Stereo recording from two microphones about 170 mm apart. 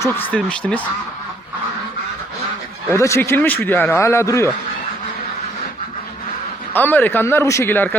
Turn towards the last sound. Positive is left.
turn(degrees=10)  # may be behind; listen again after turning